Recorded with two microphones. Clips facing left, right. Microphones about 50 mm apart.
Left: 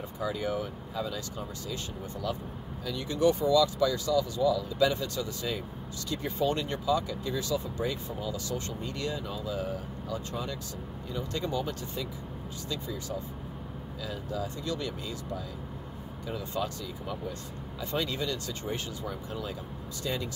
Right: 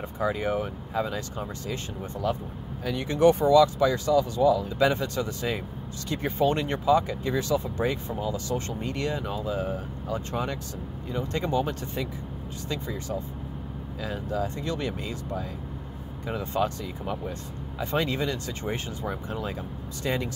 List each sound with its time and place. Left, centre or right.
0.2 s speech: right
2.2 s speech: right
14.0 s speech: right